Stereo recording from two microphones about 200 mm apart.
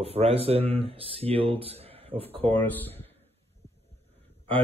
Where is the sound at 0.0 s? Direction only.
30° right (ahead or behind).